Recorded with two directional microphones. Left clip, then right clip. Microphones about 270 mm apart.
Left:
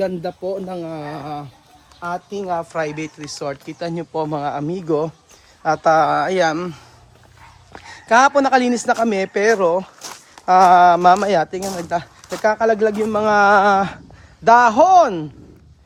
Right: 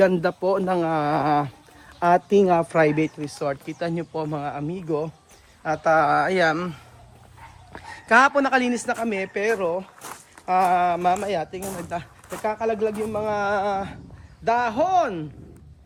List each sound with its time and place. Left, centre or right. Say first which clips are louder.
0.0 s a man's voice: right 3 dB; centre
1.1 s speech: right 8 dB; right
3.2 s a man's voice: left 1 dB; centre; by 15.3 s left